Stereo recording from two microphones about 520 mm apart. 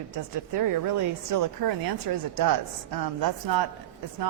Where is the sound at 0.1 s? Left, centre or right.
Right.